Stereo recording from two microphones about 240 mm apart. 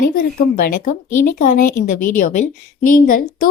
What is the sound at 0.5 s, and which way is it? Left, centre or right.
Speech, left.